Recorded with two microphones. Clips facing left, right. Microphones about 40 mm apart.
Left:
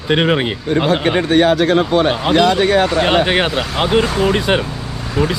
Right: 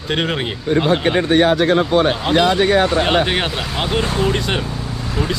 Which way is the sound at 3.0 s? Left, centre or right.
Centre.